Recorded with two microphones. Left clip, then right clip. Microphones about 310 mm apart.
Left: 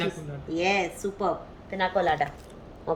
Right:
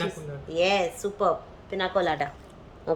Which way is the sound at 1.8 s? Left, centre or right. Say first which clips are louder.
Left 1 dB; right.